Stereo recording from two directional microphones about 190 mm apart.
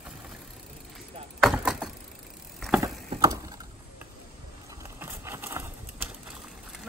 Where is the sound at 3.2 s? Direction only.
20° right (ahead or behind).